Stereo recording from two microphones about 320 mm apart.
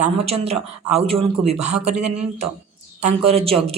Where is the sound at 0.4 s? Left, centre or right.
Centre.